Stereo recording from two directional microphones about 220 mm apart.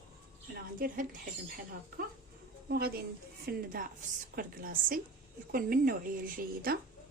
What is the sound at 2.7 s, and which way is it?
A woman's voice, 45° right (ahead or behind).